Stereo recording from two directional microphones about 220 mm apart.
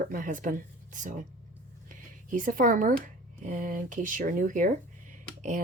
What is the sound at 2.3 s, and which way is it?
Speech, 35° right (ahead or behind).